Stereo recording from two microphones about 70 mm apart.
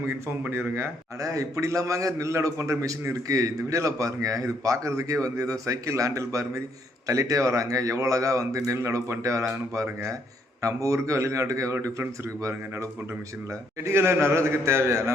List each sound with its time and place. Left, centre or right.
0.5 s a man's voice: right
1.2 s a man's voice: right